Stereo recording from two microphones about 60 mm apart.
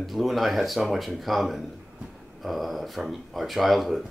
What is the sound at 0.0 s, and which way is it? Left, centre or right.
Speech, centre.